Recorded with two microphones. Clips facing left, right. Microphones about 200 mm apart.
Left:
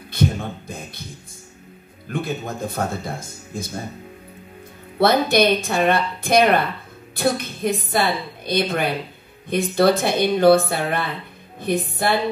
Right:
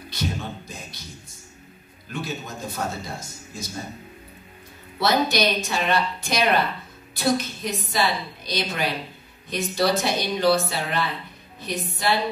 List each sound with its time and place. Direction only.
0.1 s a sound: 55° left (ahead or behind)
2.0 s speech: 55° left (ahead or behind)
4.9 s a woman's voice: 55° left (ahead or behind)